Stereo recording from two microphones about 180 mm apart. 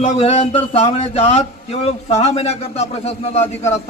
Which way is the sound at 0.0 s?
35° left (ahead or behind).